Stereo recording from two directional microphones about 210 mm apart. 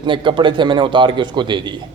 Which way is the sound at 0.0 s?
25° right (ahead or behind).